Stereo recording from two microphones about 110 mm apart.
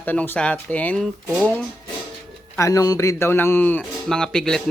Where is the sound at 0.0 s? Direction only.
15° left (ahead or behind).